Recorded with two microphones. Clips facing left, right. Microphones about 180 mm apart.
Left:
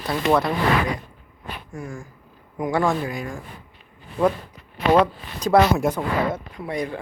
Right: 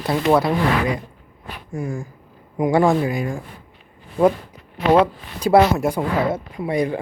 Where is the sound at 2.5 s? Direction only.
15° right (ahead or behind).